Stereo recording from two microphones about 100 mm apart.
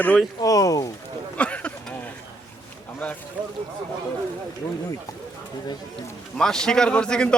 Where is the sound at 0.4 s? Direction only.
35° left (ahead or behind).